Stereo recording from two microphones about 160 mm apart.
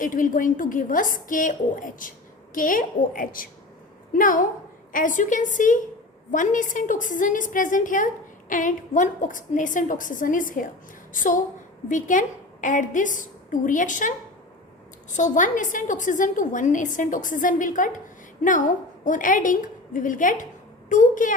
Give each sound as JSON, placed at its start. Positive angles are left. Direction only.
{"t": 0.0, "sound": "a woman's voice", "side_deg": 55}
{"t": 15.1, "sound": "a woman's voice", "side_deg": 50}